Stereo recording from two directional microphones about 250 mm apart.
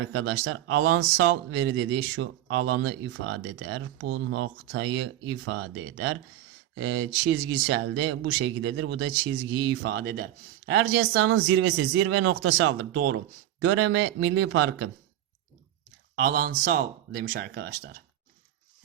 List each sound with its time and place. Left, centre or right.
0.1 s speech: right
16.1 s speech: right